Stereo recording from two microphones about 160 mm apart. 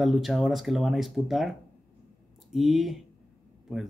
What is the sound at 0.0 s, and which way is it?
Speech, centre (ahead or behind).